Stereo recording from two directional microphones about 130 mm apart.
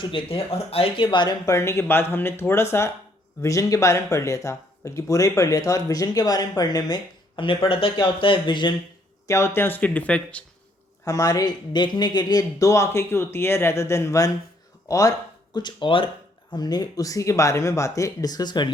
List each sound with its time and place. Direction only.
0.0 s speech: 40° left (ahead or behind)
9.2 s speech: 20° left (ahead or behind)
11.0 s speech: 25° left (ahead or behind)
15.5 s speech: 35° left (ahead or behind)